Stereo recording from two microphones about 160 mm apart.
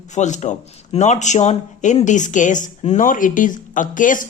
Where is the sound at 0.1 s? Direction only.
45° left (ahead or behind).